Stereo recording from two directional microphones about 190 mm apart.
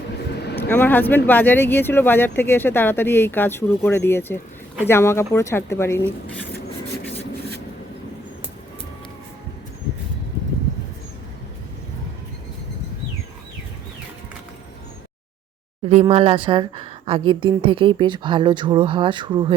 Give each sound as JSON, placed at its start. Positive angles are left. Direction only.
{"t": 0.7, "sound": "speech", "side_deg": 10}
{"t": 15.9, "sound": "a woman's voice", "side_deg": -35}